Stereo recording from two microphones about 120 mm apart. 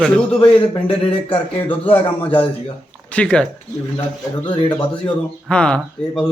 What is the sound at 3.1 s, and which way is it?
Speech, 10° left (ahead or behind).